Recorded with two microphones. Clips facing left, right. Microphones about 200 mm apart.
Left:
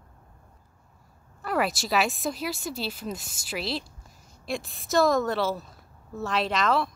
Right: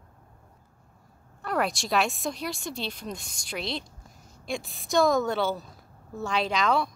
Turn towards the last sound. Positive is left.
turn(degrees=0)  # may be behind; listen again after turning